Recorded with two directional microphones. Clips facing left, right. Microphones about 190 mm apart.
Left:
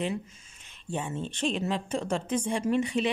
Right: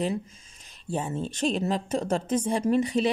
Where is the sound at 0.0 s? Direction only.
35° right (ahead or behind).